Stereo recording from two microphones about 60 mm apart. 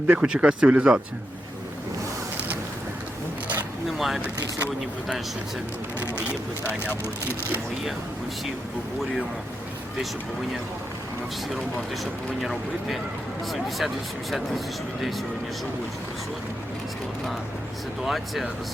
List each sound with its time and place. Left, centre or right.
0.1 s speech: centre
3.8 s a sound: centre
6.1 s speech: left
12.4 s speech: centre
18.0 s speech: centre